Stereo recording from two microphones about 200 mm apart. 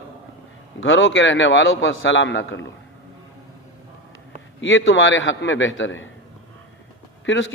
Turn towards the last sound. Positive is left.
turn(degrees=65)  # may be behind; listen again after turning